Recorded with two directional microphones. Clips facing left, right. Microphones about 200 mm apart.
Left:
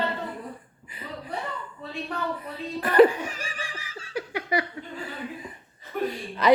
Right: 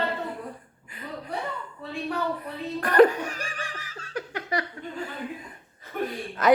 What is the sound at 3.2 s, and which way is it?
Laughter, 45° right (ahead or behind).